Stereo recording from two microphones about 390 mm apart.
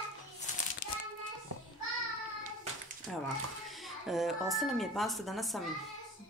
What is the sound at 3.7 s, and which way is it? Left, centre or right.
Speech, centre.